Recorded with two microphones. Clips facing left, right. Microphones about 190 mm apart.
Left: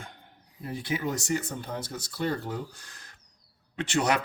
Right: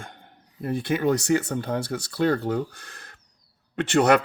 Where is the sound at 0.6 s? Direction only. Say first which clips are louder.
Right 7 dB; 55° right (ahead or behind).